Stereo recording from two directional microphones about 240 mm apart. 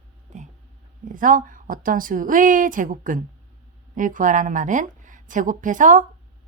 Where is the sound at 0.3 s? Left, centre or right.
Right.